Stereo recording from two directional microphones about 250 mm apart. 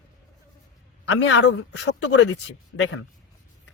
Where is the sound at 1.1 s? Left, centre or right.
Left.